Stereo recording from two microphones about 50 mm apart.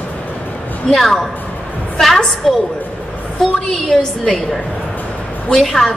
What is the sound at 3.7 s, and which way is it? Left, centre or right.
Speech, centre.